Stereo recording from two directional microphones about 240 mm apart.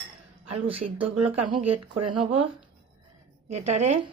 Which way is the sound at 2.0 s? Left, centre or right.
Right.